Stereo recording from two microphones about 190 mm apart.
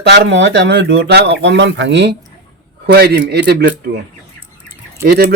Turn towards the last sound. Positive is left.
turn(degrees=-55)  # may be behind; listen again after turning